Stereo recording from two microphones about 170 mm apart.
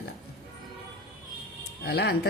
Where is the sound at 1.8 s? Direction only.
70° left (ahead or behind).